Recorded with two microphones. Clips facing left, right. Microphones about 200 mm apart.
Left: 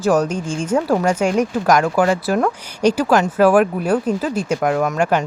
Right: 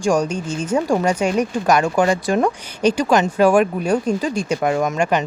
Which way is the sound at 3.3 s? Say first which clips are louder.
Left 2 dB; 5° left (ahead or behind).